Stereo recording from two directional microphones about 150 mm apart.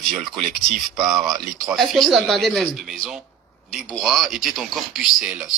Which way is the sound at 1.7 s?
Centre (ahead or behind).